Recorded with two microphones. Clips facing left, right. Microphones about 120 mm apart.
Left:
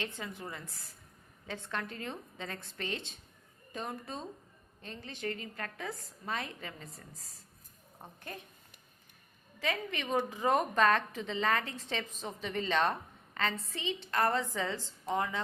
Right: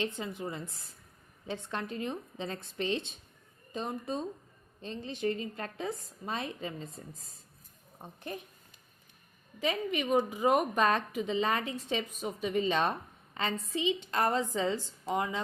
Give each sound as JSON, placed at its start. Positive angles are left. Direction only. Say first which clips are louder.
{"t": 0.0, "sound": "a woman's voice", "louder": "right 5 dB", "side_deg": -20}
{"t": 9.6, "sound": "a woman's voice", "louder": "right 4 dB", "side_deg": -15}